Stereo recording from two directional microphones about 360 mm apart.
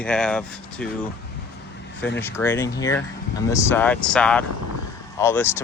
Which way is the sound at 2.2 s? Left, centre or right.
Centre.